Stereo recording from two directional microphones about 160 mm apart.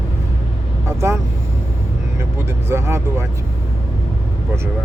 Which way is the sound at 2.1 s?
15° right (ahead or behind).